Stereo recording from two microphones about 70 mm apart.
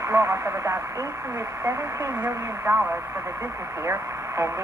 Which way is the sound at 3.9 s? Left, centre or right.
Right.